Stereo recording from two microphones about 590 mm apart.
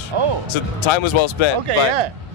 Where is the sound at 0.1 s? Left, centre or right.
Right.